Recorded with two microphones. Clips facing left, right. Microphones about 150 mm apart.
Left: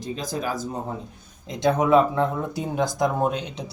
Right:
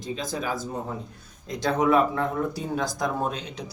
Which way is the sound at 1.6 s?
20° left (ahead or behind).